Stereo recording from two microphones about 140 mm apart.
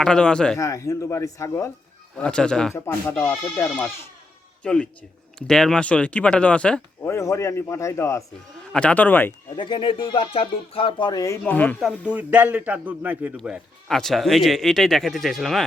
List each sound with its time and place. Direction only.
0.0 s speech: 5° left (ahead or behind)
0.6 s a man's voice: 20° left (ahead or behind)
2.1 s speech: 5° left (ahead or behind)
2.7 s speech: 15° left (ahead or behind)
7.0 s a man's voice: 20° left (ahead or behind)
8.7 s speech: 10° left (ahead or behind)
9.6 s speech: 35° left (ahead or behind)
11.4 s speech: 10° left (ahead or behind)
12.1 s a man's voice: 10° right (ahead or behind)